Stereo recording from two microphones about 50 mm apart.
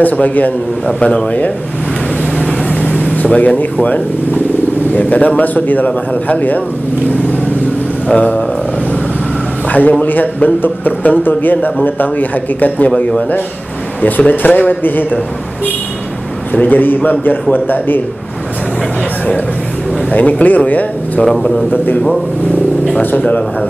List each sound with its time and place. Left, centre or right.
0.0 s speech: left
2.7 s vehicle: left
3.3 s speech: left
8.1 s speech: left
9.7 s speech: left
16.6 s speech: left
20.1 s speech: left
21.2 s a man's voice: centre
23.1 s speech: left